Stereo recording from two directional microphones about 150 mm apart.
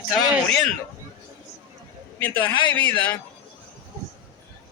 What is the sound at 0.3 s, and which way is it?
Speech, 5° left (ahead or behind).